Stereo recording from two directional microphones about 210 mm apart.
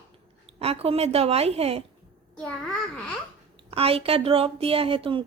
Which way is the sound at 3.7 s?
25° right (ahead or behind).